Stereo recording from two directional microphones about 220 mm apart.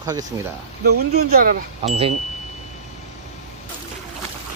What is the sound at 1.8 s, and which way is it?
Speech, 25° right (ahead or behind).